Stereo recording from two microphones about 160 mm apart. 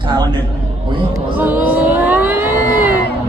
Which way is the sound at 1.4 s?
10° right (ahead or behind).